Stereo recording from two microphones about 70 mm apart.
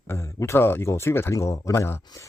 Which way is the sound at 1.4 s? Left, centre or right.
Left.